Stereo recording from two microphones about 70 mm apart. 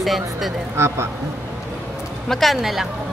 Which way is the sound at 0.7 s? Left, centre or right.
Right.